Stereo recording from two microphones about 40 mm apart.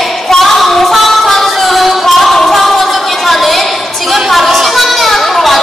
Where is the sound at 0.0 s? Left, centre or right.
Centre.